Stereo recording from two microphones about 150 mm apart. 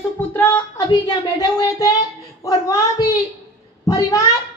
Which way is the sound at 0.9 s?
25° left (ahead or behind).